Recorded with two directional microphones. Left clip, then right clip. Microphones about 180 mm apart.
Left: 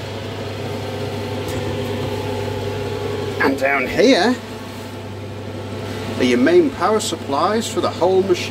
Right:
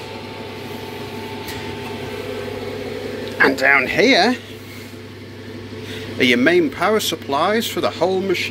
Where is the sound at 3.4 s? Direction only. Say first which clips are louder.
Right 4 dB; 25° right (ahead or behind).